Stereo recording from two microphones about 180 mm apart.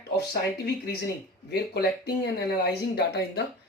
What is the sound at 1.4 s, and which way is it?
Speech, 65° left (ahead or behind).